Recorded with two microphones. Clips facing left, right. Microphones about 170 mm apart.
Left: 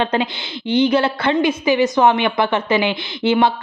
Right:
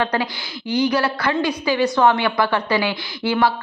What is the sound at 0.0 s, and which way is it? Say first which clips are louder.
A woman's voice: left 2 dB; 25° left (ahead or behind).